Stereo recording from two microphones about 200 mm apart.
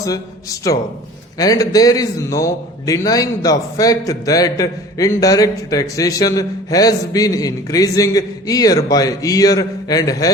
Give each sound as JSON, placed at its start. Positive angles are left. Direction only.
{"t": 1.4, "sound": "a man's voice", "side_deg": 20}